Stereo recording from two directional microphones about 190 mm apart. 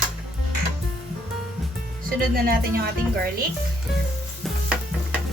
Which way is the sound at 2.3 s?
50° right (ahead or behind).